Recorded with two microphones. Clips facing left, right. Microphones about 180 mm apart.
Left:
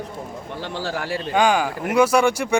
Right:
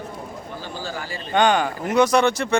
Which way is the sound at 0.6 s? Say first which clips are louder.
Left 6 dB; 70° left (ahead or behind).